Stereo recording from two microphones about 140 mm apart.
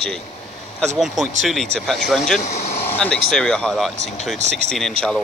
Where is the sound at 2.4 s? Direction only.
50° left (ahead or behind).